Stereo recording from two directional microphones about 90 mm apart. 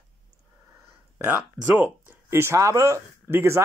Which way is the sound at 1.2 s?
10° right (ahead or behind).